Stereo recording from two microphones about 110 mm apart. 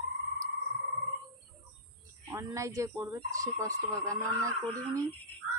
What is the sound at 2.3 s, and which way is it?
Speech, 30° right (ahead or behind).